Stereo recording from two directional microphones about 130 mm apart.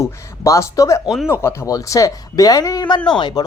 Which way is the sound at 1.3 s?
20° left (ahead or behind).